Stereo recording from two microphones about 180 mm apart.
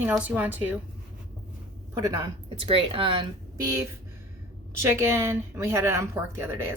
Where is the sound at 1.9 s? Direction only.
20° right (ahead or behind).